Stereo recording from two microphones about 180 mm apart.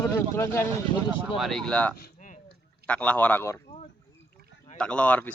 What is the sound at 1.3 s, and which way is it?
Speech, centre (ahead or behind).